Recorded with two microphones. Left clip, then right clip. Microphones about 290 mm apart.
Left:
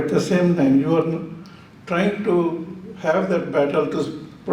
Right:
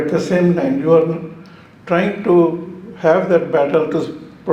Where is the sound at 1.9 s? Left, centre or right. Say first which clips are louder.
Right 5 dB; right.